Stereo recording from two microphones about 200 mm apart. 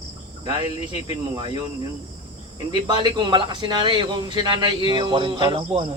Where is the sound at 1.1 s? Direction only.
25° right (ahead or behind).